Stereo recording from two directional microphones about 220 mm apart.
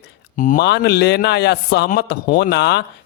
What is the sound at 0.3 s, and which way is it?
Speech, 40° left (ahead or behind).